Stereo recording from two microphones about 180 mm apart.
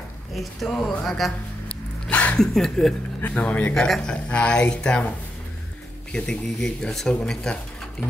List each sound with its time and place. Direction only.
0.3 s speech: centre (ahead or behind)
6.1 s speech: 5° left (ahead or behind)